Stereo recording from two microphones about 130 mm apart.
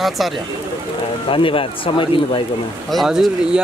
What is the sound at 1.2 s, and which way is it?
Speech, 40° left (ahead or behind).